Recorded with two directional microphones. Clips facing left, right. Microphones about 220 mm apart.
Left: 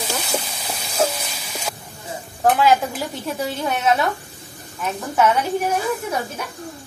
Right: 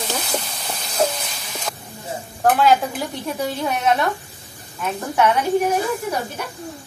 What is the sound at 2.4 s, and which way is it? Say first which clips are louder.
A woman's voice: even; centre (ahead or behind).